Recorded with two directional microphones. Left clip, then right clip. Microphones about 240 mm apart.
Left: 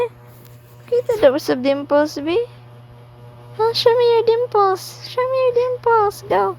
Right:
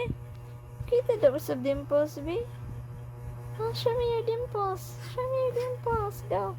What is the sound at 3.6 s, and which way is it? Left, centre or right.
A woman's voice, left.